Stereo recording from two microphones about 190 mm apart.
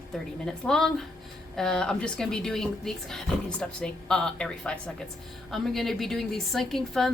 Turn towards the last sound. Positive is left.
turn(degrees=0)  # may be behind; listen again after turning